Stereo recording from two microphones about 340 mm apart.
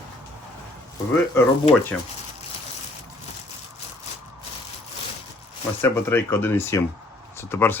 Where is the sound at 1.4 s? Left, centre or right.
Centre.